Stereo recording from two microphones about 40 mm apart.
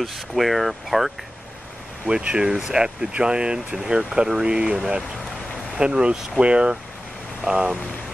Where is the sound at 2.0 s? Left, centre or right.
Right.